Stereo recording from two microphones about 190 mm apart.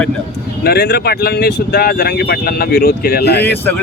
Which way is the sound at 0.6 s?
55° left (ahead or behind).